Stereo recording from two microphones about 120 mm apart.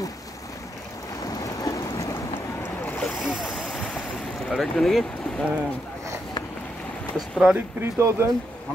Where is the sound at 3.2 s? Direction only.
5° right (ahead or behind).